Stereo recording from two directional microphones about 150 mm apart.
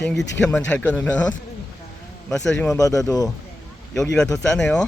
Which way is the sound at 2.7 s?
20° left (ahead or behind).